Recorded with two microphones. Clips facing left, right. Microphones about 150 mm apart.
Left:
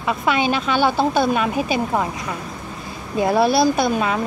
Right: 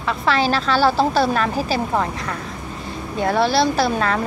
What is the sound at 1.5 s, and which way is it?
Speech, 35° right (ahead or behind).